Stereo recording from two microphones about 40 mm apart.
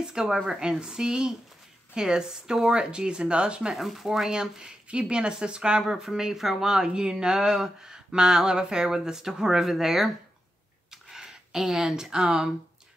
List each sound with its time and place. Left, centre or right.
0.0 s speech: centre
3.7 s speech: centre; by 5.9 s right
5.9 s speech: centre
10.9 s a sound: centre